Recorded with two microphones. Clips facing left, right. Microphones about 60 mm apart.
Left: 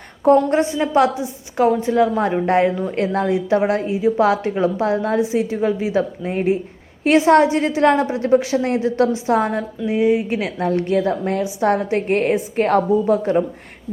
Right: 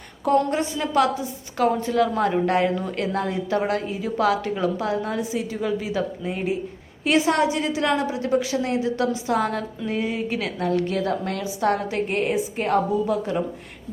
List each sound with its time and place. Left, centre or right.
0.3 s a woman's voice: left
9.5 s a sound: centre
10.0 s a woman's voice: left